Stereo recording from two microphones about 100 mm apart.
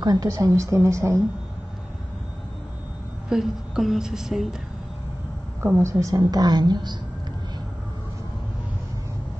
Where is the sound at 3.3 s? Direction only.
5° right (ahead or behind).